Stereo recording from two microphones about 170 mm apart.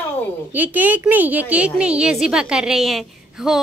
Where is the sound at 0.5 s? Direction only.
10° right (ahead or behind).